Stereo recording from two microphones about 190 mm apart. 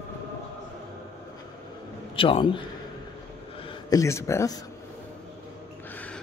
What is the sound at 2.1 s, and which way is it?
A man's voice, 25° left (ahead or behind).